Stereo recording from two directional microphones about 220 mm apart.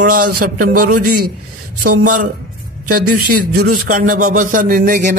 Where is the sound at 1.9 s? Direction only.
90° right.